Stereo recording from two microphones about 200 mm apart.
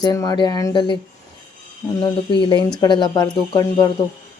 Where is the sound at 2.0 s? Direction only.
20° left (ahead or behind).